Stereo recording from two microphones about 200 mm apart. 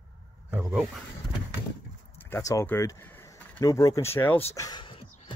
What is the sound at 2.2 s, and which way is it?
Speech, 15° left (ahead or behind).